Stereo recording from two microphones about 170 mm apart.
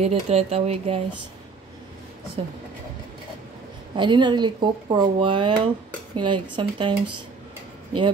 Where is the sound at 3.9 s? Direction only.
25° right (ahead or behind).